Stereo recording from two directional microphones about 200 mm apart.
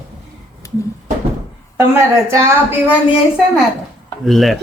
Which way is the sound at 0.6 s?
15° left (ahead or behind).